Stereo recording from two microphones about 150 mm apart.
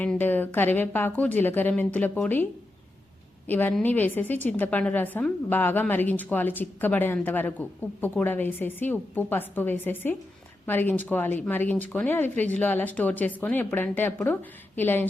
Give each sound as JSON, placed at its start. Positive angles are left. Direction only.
{"t": 0.0, "sound": "a woman's voice", "side_deg": 10}